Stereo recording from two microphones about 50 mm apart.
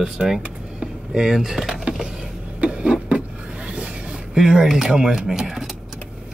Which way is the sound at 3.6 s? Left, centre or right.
Centre.